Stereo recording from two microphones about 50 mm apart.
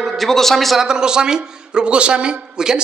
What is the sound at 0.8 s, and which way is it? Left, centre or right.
A man's voice, centre.